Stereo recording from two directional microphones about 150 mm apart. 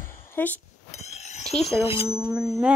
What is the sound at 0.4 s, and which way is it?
Speech, 15° left (ahead or behind).